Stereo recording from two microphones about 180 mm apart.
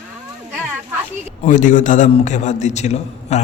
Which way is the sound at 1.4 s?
45° left (ahead or behind).